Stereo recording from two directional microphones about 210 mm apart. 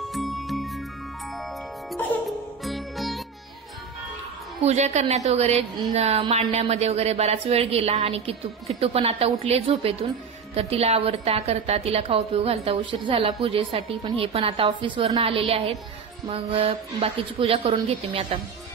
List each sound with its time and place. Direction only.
0.1 s music: centre (ahead or behind)
2.6 s music: centre (ahead or behind)
4.6 s a woman's voice: 30° right (ahead or behind)